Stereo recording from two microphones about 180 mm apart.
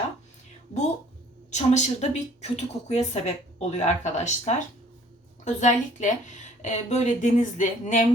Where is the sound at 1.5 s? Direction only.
40° left (ahead or behind).